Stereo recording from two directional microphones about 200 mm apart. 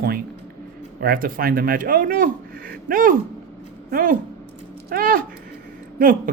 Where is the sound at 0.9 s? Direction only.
45° right (ahead or behind).